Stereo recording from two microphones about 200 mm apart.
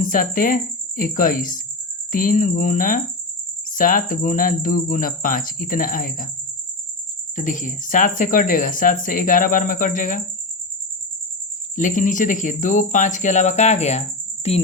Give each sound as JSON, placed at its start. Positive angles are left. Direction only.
{"t": 0.0, "sound": "speech", "side_deg": 45}
{"t": 7.3, "sound": "speech", "side_deg": 40}
{"t": 11.8, "sound": "speech", "side_deg": 40}